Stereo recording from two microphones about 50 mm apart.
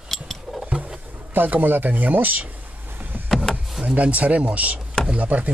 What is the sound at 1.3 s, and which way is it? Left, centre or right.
Speech, right.